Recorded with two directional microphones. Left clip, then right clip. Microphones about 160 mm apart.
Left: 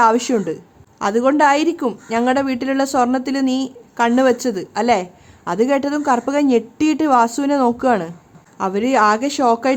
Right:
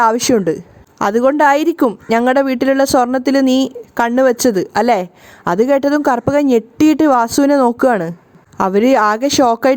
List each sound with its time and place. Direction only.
0.0 s a woman's voice: 45° right (ahead or behind)